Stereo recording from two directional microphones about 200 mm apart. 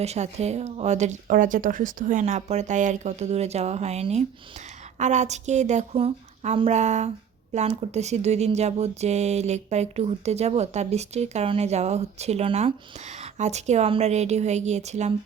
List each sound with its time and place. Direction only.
0.0 s speech: 35° right (ahead or behind)